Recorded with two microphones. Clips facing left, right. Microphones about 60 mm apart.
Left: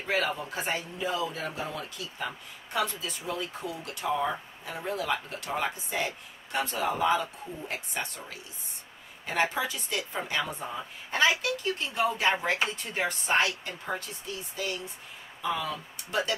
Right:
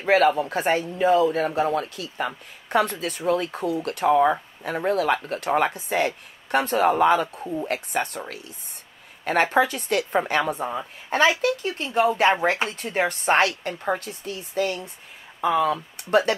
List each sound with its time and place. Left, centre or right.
0.0 s speech: right
10.8 s speech: right
12.2 s speech: right